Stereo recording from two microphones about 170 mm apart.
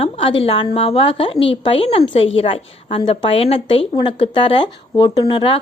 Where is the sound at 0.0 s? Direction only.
35° left (ahead or behind).